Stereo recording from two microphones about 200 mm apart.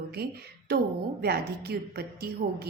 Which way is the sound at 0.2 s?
50° right (ahead or behind).